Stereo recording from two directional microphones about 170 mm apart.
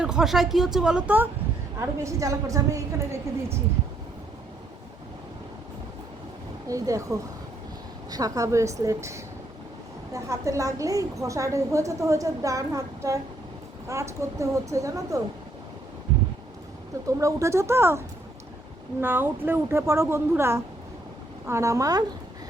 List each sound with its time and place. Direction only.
0.0 s a woman's voice: 5° right (ahead or behind); by 3.2 s 20° right (ahead or behind)
6.7 s a woman's voice: 20° right (ahead or behind)
17.1 s a woman's voice: 20° right (ahead or behind)